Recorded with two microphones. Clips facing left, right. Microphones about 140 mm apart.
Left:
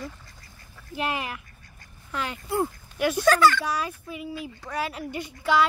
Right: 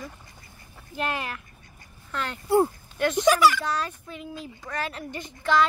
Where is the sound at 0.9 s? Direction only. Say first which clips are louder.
Left 1 dB; 10° left (ahead or behind).